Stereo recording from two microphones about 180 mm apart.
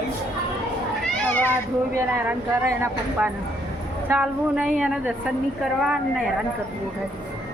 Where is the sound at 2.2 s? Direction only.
10° right (ahead or behind).